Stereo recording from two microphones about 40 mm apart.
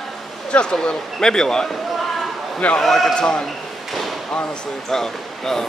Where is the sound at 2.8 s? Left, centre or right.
Centre.